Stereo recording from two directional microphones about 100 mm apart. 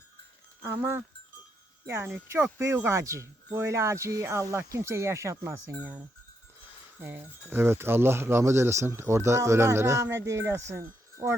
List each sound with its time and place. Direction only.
0.6 s speech: 25° right (ahead or behind)
2.3 s speech: 30° right (ahead or behind)
5.7 s speech: 15° right (ahead or behind)
7.0 s speech: 20° right (ahead or behind)